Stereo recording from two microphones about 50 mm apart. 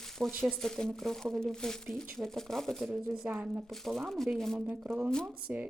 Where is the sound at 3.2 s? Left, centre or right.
Right.